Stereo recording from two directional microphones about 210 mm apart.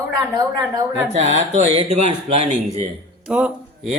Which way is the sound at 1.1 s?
30° right (ahead or behind).